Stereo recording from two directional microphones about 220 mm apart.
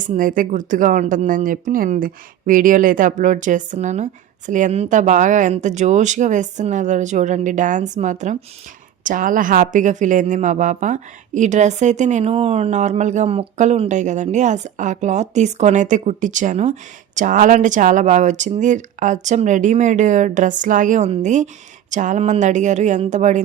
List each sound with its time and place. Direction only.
0.0 s a woman's voice: 35° right (ahead or behind)